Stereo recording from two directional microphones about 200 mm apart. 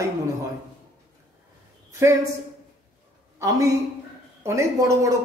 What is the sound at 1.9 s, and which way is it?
Speech, 15° right (ahead or behind).